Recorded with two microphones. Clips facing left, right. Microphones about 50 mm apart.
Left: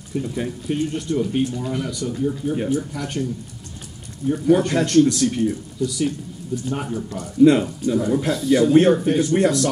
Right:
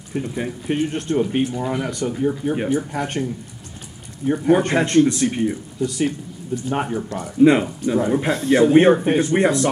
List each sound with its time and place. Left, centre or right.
0.1 s speech: right
1.6 s speech: right
4.3 s speech: right
5.9 s speech: right
7.2 s speech: right